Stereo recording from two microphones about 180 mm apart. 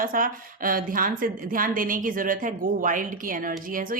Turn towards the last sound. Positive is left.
turn(degrees=-50)  # may be behind; listen again after turning